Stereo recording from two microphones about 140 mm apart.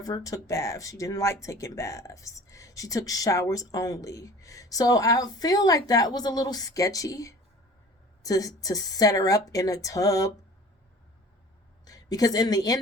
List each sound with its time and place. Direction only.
0.0 s speech: 25° left (ahead or behind)
11.9 s speech: 25° left (ahead or behind)